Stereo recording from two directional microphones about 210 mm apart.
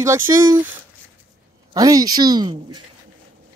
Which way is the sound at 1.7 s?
15° right (ahead or behind).